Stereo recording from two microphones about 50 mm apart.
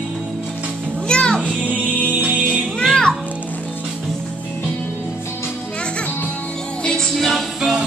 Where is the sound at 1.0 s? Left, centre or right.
Centre.